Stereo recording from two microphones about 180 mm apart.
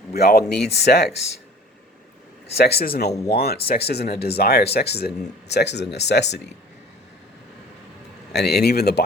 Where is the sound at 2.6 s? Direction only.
60° left (ahead or behind).